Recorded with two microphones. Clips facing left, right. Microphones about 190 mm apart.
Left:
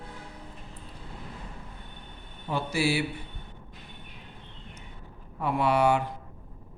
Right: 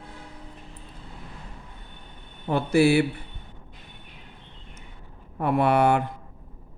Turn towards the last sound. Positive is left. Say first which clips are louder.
# right 3 dB
turn(degrees=-55)  # may be behind; listen again after turning